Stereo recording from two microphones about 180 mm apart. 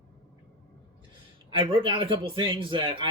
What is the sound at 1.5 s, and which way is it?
Speech, 30° right (ahead or behind).